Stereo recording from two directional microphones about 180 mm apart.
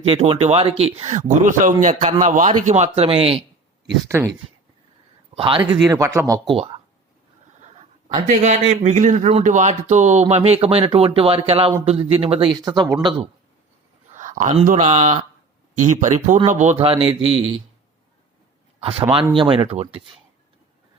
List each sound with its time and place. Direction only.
0.0 s speech: 30° right (ahead or behind)
5.3 s speech: 30° right (ahead or behind)
5.9 s speech: 20° right (ahead or behind)
6.5 s speech: 30° right (ahead or behind)
8.1 s speech: 40° right (ahead or behind); by 13.1 s 25° right (ahead or behind)
14.1 s speech: 45° right (ahead or behind)
16.8 s a man's voice: 30° right (ahead or behind)
18.8 s speech: 30° right (ahead or behind)